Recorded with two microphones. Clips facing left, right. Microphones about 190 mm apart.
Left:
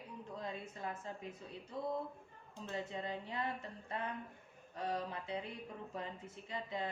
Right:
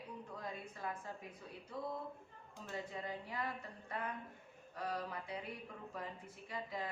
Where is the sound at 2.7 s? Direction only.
25° left (ahead or behind).